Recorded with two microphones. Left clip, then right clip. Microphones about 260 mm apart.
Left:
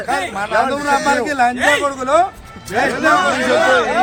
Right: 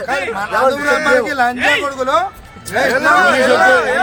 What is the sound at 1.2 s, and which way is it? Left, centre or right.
A man's voice, centre.